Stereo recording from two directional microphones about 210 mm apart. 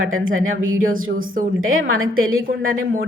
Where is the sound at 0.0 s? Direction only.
70° right (ahead or behind).